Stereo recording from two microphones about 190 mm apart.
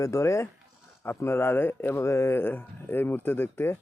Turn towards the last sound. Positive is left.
turn(degrees=10)  # may be behind; listen again after turning